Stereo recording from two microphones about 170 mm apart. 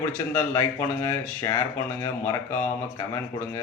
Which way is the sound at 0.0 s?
15° left (ahead or behind).